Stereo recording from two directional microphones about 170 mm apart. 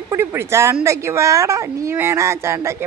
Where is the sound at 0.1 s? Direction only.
15° right (ahead or behind).